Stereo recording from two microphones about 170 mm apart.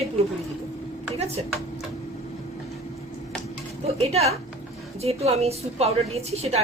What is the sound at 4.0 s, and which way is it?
A woman's voice, 40° right (ahead or behind).